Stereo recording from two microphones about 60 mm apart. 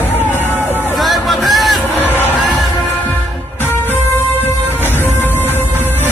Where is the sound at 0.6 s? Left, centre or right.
Right.